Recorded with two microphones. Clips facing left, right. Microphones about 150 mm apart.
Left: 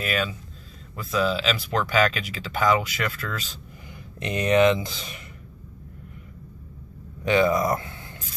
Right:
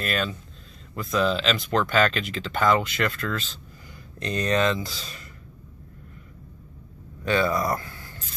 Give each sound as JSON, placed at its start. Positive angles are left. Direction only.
{"t": 0.0, "sound": "speech", "side_deg": 10}
{"t": 7.2, "sound": "speech", "side_deg": 20}